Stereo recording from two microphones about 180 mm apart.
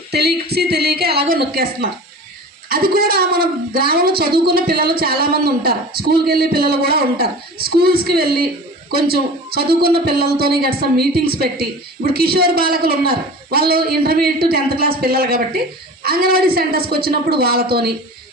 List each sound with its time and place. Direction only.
0.1 s a woman's voice: 65° right (ahead or behind)